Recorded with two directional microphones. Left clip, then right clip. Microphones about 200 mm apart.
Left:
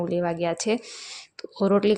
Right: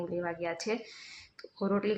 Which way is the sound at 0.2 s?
40° left (ahead or behind).